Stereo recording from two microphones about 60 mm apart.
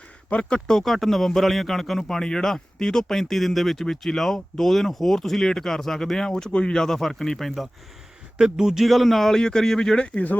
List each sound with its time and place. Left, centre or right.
0.3 s speech: left
0.7 s a man's voice: centre
8.4 s a man's voice: centre